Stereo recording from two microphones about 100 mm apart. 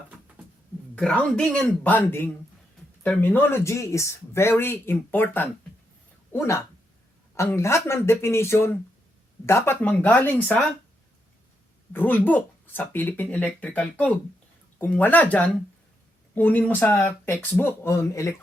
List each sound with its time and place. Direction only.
0.9 s a man's voice: 10° left (ahead or behind); by 9.7 s 25° left (ahead or behind)
9.8 s speech: 15° left (ahead or behind)
11.9 s a man's voice: 20° left (ahead or behind)